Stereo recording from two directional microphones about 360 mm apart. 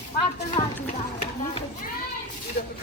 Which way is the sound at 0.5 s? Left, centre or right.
Centre.